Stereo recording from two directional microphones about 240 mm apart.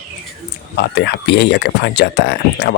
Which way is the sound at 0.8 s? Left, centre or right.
Left.